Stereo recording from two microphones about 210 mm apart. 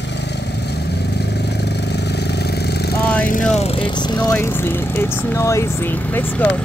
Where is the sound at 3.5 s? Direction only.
25° left (ahead or behind); by 6.6 s 10° left (ahead or behind).